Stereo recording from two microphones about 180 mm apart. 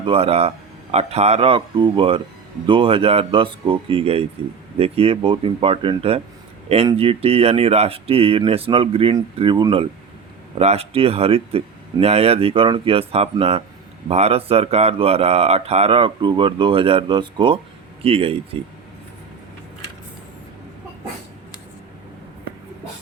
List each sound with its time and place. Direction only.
0.0 s speech: 30° right (ahead or behind)